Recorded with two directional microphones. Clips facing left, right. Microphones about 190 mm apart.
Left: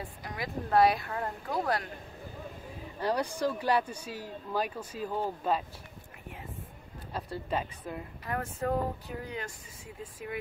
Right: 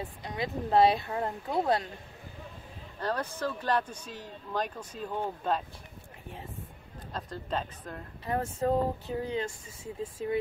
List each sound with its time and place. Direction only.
0.2 s speech: 25° right (ahead or behind)
3.0 s speech: 10° left (ahead or behind)
7.1 s speech: 10° left (ahead or behind)
8.3 s speech: 25° right (ahead or behind)